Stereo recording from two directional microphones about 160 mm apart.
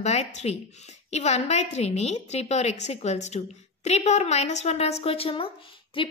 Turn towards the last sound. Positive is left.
turn(degrees=35)  # may be behind; listen again after turning